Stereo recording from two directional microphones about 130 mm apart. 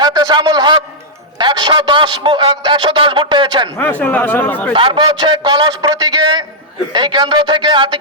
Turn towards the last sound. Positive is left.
turn(degrees=-35)  # may be behind; listen again after turning